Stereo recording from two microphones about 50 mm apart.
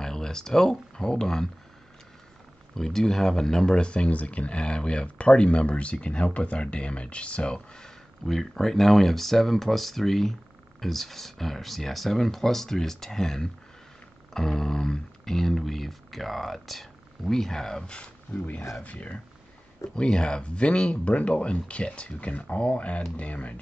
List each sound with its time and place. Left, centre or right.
0.0 s speech: centre
2.7 s speech: centre
17.9 s speech: left
20.0 s speech: centre